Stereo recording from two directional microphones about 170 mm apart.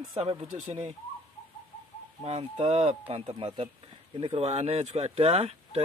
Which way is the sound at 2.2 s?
40° right (ahead or behind).